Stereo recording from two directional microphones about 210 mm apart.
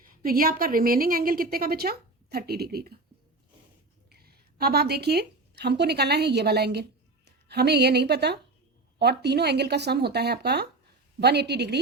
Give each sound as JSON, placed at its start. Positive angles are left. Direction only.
{"t": 0.0, "sound": "a woman's voice", "side_deg": -45}
{"t": 4.1, "sound": "a woman's voice", "side_deg": -45}